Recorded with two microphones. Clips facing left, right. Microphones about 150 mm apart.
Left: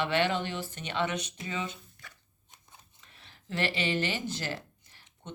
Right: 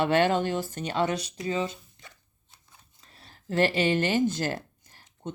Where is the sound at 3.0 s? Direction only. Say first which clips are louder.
Right 3 dB; 35° right (ahead or behind).